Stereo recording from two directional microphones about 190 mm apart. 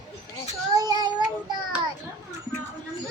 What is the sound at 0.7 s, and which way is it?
Child singing, 20° right (ahead or behind).